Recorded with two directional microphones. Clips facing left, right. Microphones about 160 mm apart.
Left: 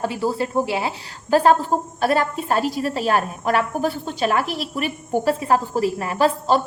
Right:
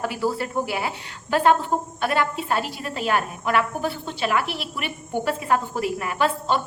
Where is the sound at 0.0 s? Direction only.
25° left (ahead or behind).